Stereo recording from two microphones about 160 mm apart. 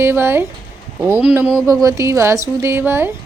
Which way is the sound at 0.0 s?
15° right (ahead or behind).